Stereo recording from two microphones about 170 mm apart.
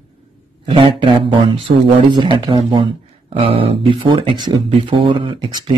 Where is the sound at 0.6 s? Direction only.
30° right (ahead or behind).